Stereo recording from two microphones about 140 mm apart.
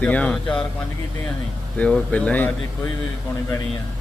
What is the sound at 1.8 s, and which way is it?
Speech, 10° left (ahead or behind).